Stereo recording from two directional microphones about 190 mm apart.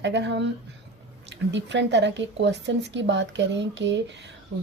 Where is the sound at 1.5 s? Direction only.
70° right (ahead or behind).